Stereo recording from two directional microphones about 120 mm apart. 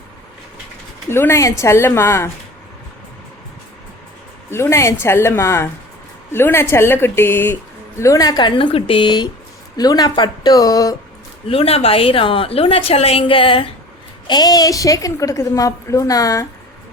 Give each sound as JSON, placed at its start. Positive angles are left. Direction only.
{"t": 1.1, "sound": "speech", "side_deg": 20}
{"t": 4.5, "sound": "speech", "side_deg": 25}
{"t": 11.4, "sound": "a woman's voice", "side_deg": 55}
{"t": 14.3, "sound": "speech", "side_deg": 35}